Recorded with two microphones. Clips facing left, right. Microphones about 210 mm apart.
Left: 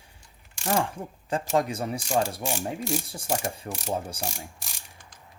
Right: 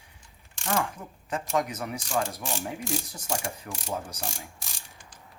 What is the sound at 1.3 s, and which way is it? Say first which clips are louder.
Speech: left 3 dB; 30° left (ahead or behind).